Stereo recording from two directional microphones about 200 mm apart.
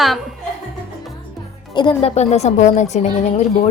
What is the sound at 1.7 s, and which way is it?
A woman's voice, 20° left (ahead or behind).